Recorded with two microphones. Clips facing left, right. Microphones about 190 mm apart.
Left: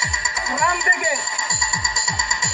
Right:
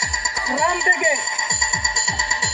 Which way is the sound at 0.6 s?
25° right (ahead or behind).